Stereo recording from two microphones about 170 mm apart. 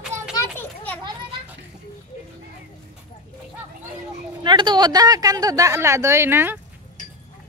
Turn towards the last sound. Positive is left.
turn(degrees=-15)  # may be behind; listen again after turning